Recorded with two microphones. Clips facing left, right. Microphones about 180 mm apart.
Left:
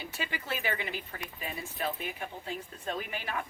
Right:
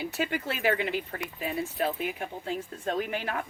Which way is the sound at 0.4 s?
65° right (ahead or behind).